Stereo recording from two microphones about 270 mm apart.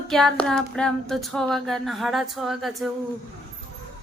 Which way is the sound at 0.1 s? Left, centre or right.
Centre.